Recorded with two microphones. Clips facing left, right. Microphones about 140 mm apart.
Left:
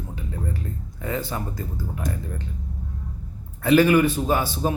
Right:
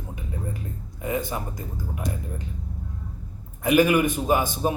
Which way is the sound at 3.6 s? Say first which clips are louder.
Left 2 dB; 15° right (ahead or behind).